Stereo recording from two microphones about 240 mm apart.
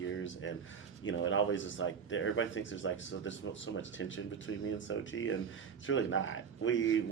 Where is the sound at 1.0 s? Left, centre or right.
Left.